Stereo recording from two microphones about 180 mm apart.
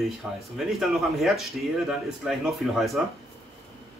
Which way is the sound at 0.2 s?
Centre (ahead or behind).